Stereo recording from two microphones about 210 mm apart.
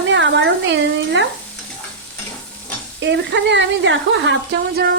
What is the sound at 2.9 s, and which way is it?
Speech, 60° right (ahead or behind).